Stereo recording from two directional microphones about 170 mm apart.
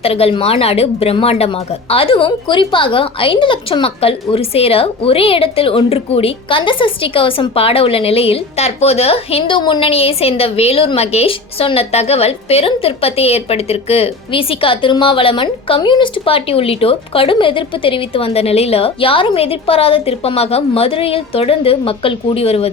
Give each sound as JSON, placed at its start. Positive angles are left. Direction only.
{"t": 0.0, "sound": "a woman's voice", "side_deg": 35}